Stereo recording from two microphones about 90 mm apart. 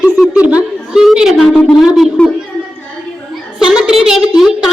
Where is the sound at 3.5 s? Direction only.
5° right (ahead or behind).